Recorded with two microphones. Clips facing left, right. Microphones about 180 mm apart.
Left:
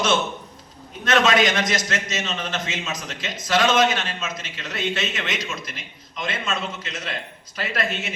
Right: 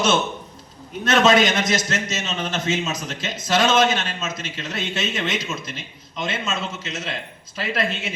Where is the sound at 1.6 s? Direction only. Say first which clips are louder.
Right 2 dB; 25° right (ahead or behind).